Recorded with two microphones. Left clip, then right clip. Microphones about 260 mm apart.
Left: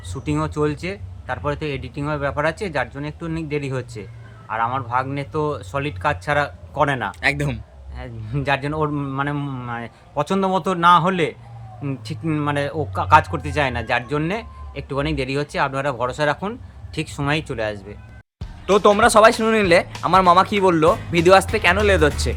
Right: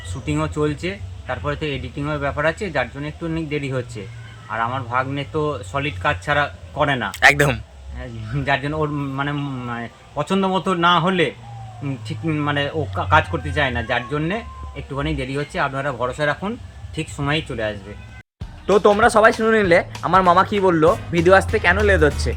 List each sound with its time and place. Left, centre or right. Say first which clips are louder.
0.1 s speech: even; centre
7.2 s speech: right 8 dB; centre
7.9 s speech: even; centre
18.6 s speech: even; centre